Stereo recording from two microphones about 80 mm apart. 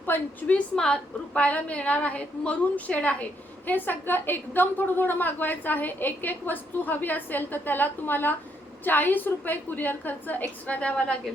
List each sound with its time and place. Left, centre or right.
0.0 s a woman's voice: left
0.8 s a woman's voice: centre